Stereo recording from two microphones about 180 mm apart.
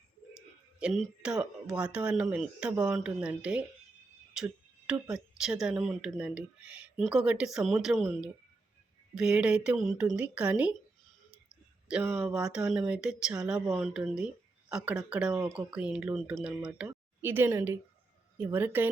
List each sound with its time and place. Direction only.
0.8 s speech: 5° right (ahead or behind)
11.9 s speech: 10° right (ahead or behind)